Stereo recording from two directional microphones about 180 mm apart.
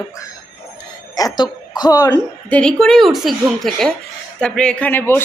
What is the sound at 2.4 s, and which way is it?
Speech, 5° left (ahead or behind).